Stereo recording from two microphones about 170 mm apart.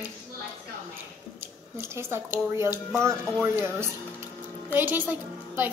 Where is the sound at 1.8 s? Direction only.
15° right (ahead or behind).